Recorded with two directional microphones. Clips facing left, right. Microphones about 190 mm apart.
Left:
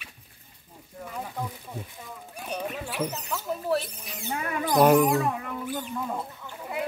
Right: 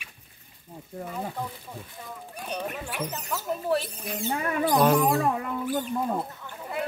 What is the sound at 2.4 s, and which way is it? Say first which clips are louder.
Speech: even; 5° left (ahead or behind).